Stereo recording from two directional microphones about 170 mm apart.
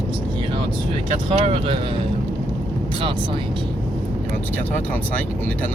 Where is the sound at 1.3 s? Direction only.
30° right (ahead or behind).